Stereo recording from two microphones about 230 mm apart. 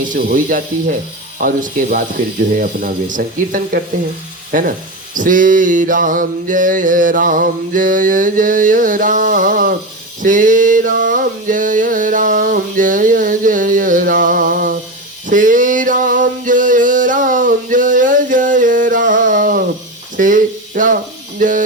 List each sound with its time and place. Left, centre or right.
0.1 s mantra: right
5.1 s mantra: right
10.2 s a sound: right